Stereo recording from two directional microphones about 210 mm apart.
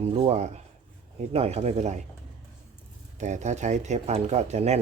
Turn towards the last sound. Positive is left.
turn(degrees=-30)  # may be behind; listen again after turning